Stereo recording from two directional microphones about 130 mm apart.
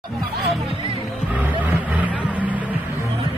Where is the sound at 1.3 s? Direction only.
10° right (ahead or behind).